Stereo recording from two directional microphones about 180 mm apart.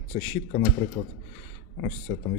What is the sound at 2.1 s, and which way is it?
Speech, 30° left (ahead or behind).